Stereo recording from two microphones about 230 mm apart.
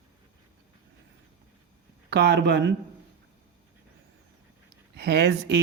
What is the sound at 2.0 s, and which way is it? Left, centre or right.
Speech, right.